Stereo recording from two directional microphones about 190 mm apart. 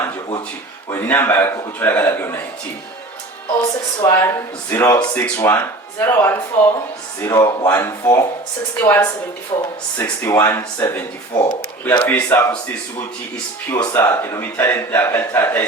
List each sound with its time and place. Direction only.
0.9 s speech: 10° left (ahead or behind)
4.1 s speech: 15° left (ahead or behind)
9.5 s speech: 25° left (ahead or behind)
10.0 s speech: 15° left (ahead or behind)
13.7 s speech: 10° left (ahead or behind)